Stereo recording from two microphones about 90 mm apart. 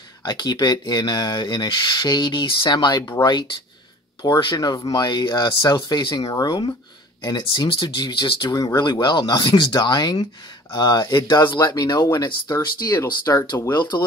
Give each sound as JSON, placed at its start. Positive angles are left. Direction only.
{"t": 0.2, "sound": "speech", "side_deg": 50}
{"t": 13.7, "sound": "speech", "side_deg": 50}